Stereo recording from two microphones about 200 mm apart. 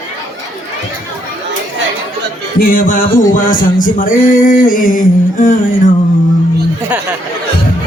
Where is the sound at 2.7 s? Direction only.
45° left (ahead or behind).